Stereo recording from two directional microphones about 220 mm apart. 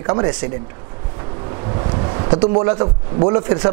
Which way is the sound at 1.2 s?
25° right (ahead or behind).